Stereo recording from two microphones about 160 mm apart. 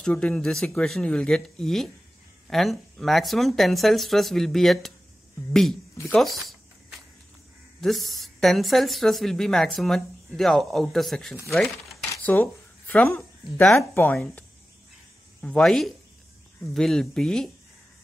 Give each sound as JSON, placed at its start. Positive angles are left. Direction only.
{"t": 0.0, "sound": "speech", "side_deg": 5}
{"t": 6.1, "sound": "a sound", "side_deg": 0}
{"t": 7.8, "sound": "speech", "side_deg": 0}
{"t": 11.5, "sound": "a sound", "side_deg": 0}
{"t": 13.6, "sound": "speech", "side_deg": 10}
{"t": 15.4, "sound": "speech", "side_deg": 5}